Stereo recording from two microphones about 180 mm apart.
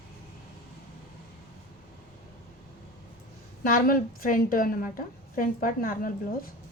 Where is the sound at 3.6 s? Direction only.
50° left (ahead or behind).